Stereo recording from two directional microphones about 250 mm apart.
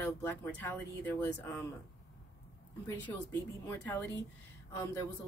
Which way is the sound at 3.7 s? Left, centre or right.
Centre.